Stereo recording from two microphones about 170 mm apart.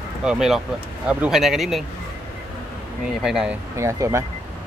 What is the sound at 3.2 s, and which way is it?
Speech, 5° right (ahead or behind).